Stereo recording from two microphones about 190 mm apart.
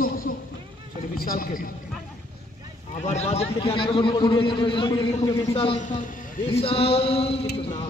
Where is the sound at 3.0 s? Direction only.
35° left (ahead or behind).